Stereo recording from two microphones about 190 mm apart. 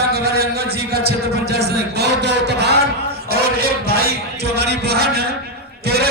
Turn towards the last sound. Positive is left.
turn(degrees=-55)  # may be behind; listen again after turning